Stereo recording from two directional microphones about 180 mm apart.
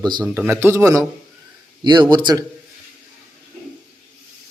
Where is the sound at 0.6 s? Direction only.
15° right (ahead or behind).